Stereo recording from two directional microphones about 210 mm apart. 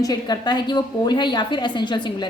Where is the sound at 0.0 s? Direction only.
20° left (ahead or behind).